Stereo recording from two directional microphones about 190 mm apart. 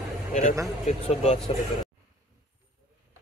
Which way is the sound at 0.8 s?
40° left (ahead or behind).